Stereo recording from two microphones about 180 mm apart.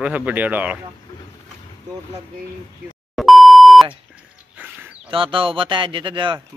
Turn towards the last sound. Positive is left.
turn(degrees=-25)  # may be behind; listen again after turning